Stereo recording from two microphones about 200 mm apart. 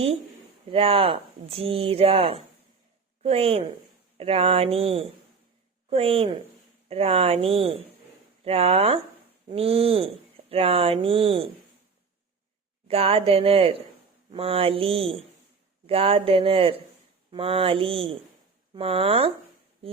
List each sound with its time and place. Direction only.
0.7 s speech: 30° right (ahead or behind)
12.9 s speech: 30° right (ahead or behind)